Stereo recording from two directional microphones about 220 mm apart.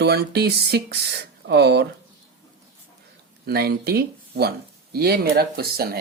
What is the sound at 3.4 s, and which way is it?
Speech, 45° right (ahead or behind).